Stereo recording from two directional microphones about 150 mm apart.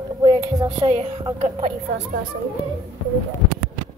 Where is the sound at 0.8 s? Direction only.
40° right (ahead or behind).